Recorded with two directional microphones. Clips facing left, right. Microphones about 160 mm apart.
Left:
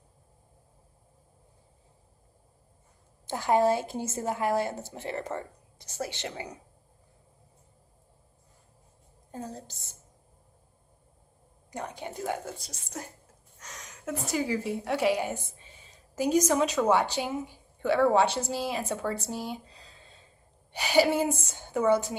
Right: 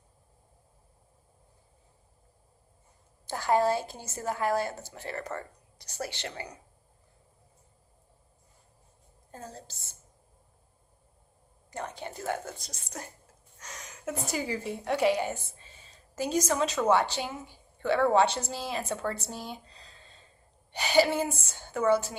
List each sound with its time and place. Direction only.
3.2 s a woman's voice: 20° left (ahead or behind)
9.3 s speech: 15° left (ahead or behind)
11.7 s a woman's voice: 15° left (ahead or behind)